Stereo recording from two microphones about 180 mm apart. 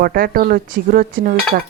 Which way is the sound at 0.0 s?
55° right (ahead or behind).